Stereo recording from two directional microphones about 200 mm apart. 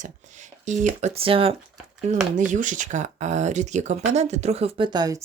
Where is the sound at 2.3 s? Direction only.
40° right (ahead or behind).